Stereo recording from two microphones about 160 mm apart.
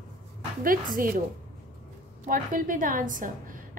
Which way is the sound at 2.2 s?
60° right (ahead or behind).